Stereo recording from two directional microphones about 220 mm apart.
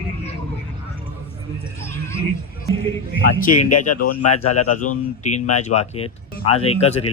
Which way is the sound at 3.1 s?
35° left (ahead or behind).